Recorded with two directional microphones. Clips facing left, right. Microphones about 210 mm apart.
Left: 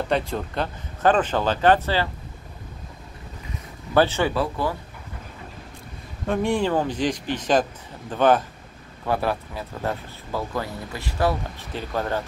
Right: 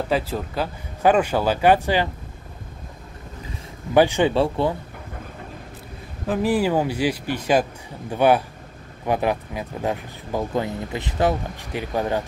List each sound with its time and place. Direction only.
0.1 s speech: 5° right (ahead or behind)
3.9 s speech: 15° right (ahead or behind)
4.3 s speech: 25° right (ahead or behind)
6.2 s speech: 5° right (ahead or behind)